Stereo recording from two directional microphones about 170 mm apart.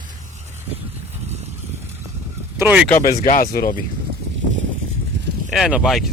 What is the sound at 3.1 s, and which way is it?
Speech, 50° left (ahead or behind).